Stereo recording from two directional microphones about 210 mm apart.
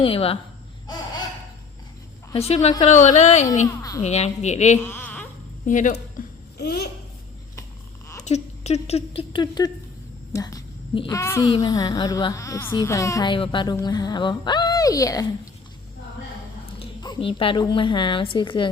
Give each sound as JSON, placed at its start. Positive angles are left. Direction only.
{"t": 0.0, "sound": "speech", "side_deg": 25}
{"t": 2.3, "sound": "a woman's voice", "side_deg": 30}
{"t": 4.8, "sound": "a sound", "side_deg": 10}
{"t": 5.6, "sound": "a woman's voice", "side_deg": 35}
{"t": 6.2, "sound": "babbling", "side_deg": 40}
{"t": 8.2, "sound": "a woman's voice", "side_deg": 30}
{"t": 16.8, "sound": "a woman's voice", "side_deg": 20}